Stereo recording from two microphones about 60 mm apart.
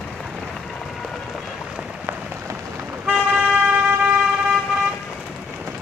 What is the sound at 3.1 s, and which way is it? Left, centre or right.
Vehicle, centre.